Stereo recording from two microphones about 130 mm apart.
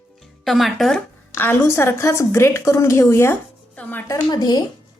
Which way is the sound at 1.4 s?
15° left (ahead or behind).